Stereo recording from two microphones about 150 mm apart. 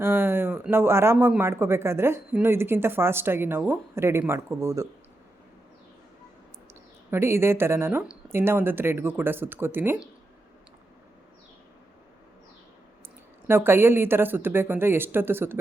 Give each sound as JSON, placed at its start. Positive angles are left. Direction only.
{"t": 0.0, "sound": "a man's voice", "side_deg": -15}
{"t": 7.1, "sound": "a man's voice", "side_deg": -15}
{"t": 13.5, "sound": "a man's voice", "side_deg": -15}